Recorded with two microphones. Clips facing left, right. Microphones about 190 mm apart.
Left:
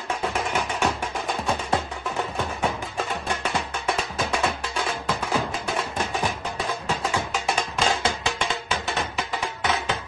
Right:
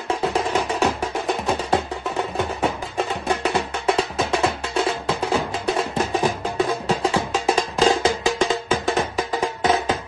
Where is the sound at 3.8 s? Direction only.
30° right (ahead or behind).